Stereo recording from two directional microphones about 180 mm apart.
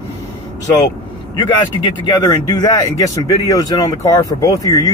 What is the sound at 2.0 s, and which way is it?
Speech, 20° left (ahead or behind).